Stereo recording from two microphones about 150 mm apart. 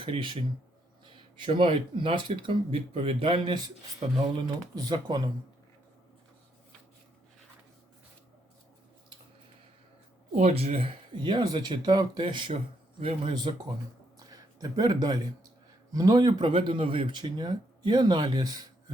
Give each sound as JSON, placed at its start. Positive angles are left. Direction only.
{"t": 0.0, "sound": "speech", "side_deg": -30}
{"t": 1.0, "sound": "a sound", "side_deg": -30}
{"t": 1.5, "sound": "speech", "side_deg": -35}
{"t": 4.0, "sound": "speech", "side_deg": -45}
{"t": 4.4, "sound": "speech", "side_deg": -30}
{"t": 10.3, "sound": "speech", "side_deg": -45}
{"t": 14.2, "sound": "a sound", "side_deg": -25}
{"t": 15.9, "sound": "speech", "side_deg": -25}